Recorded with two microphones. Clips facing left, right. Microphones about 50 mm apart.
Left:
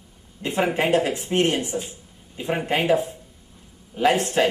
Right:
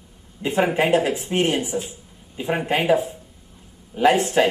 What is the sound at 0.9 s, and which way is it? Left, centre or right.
Speech, centre.